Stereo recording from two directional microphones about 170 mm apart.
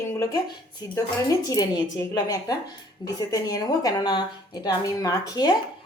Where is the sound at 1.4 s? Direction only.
20° left (ahead or behind).